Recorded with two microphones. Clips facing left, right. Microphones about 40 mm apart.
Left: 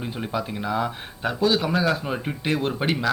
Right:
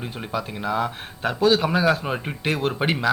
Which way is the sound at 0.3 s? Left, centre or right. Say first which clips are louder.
Right 1 dB; centre.